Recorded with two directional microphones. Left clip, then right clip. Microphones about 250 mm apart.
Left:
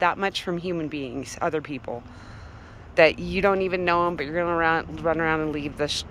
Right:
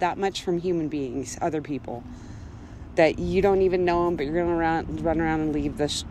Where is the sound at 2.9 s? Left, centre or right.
Centre.